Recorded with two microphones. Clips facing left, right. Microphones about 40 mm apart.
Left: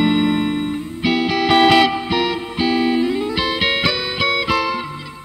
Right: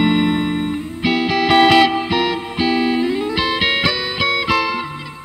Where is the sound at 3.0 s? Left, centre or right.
Right.